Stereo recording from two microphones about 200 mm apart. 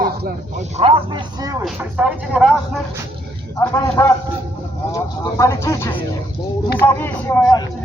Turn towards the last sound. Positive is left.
turn(degrees=15)  # may be behind; listen again after turning